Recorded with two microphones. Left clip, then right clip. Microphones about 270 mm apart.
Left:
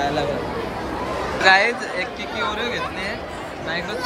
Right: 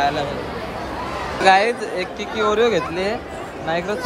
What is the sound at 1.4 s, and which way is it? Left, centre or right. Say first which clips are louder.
Speech: right 1 dB; centre.